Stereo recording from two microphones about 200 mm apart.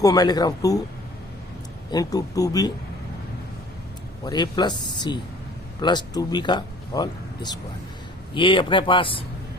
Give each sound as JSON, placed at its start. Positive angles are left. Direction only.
{"t": 0.0, "sound": "speech", "side_deg": 20}
{"t": 1.9, "sound": "speech", "side_deg": 20}
{"t": 4.2, "sound": "speech", "side_deg": 20}